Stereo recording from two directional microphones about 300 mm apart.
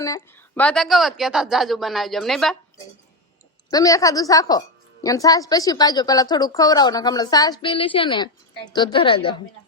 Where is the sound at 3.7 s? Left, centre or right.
Centre.